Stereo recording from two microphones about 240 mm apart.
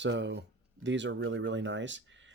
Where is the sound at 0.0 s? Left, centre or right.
Right.